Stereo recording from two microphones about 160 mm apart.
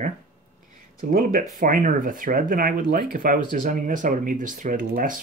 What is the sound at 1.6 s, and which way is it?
Speech, 60° right (ahead or behind).